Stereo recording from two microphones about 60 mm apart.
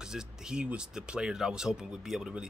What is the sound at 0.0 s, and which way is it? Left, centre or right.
Speech, centre.